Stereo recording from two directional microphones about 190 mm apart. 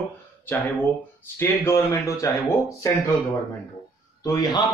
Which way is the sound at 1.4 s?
15° left (ahead or behind).